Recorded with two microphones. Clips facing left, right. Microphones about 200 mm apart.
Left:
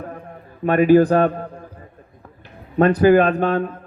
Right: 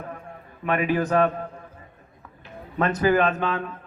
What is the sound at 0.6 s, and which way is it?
A man's voice, 40° left (ahead or behind).